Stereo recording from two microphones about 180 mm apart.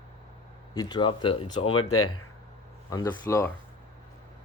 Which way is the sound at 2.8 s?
20° left (ahead or behind).